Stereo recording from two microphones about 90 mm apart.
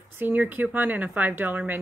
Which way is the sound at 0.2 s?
20° right (ahead or behind).